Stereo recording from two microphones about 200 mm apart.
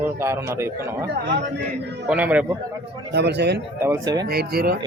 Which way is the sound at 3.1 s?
55° right (ahead or behind).